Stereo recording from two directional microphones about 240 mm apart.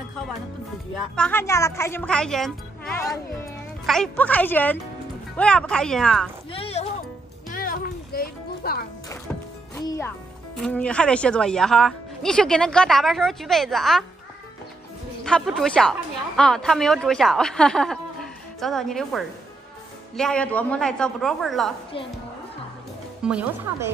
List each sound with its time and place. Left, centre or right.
1.1 s a woman's voice: centre
6.5 s music: left
7.5 s music: left
9.8 s music: centre
10.6 s a woman's voice: centre
15.2 s a woman's voice: centre
23.2 s speech: centre